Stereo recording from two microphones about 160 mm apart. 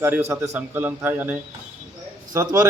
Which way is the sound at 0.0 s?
15° right (ahead or behind).